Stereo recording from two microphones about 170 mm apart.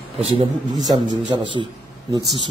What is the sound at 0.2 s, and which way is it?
A man's voice, 35° right (ahead or behind).